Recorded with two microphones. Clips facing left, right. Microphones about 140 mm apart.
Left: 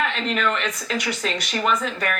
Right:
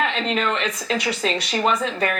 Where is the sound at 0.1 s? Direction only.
30° right (ahead or behind).